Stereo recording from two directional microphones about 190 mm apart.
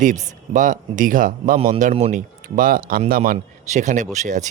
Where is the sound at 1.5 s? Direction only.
35° right (ahead or behind).